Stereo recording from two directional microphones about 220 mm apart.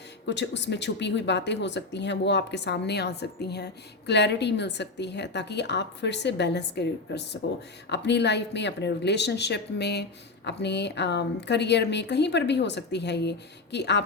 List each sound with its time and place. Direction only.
0.3 s speech: 55° left (ahead or behind)